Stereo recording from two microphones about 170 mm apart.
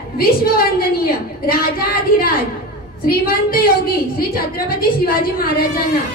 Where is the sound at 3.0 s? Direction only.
60° left (ahead or behind).